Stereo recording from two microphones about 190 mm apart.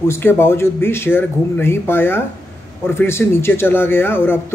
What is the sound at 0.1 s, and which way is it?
Speech, 10° left (ahead or behind).